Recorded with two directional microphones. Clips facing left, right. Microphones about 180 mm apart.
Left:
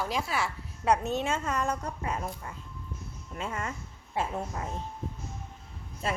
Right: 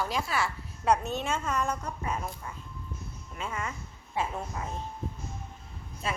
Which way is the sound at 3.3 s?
40° left (ahead or behind).